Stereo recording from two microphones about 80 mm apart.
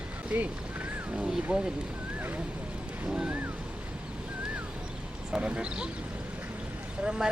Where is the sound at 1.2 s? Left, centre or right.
Centre.